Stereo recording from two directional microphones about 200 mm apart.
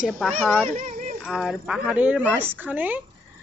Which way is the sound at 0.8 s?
40° right (ahead or behind).